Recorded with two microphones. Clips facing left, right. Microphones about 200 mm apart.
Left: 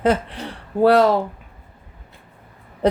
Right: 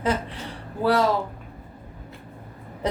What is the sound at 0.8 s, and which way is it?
Speech, 60° left (ahead or behind).